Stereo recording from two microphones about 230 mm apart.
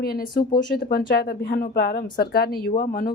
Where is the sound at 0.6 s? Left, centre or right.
Left.